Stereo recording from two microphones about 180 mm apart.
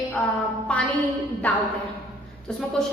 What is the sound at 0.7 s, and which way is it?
Music, 5° left (ahead or behind).